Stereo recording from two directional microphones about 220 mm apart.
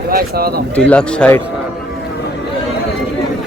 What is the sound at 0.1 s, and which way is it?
Speech, 45° right (ahead or behind).